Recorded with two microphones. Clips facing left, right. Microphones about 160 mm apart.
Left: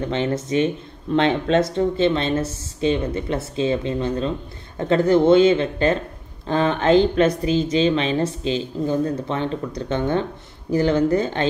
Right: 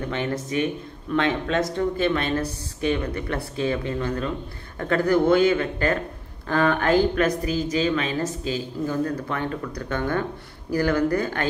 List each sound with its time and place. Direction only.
0.1 s speech: 25° left (ahead or behind)